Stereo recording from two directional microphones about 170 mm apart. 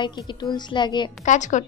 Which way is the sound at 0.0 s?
25° left (ahead or behind).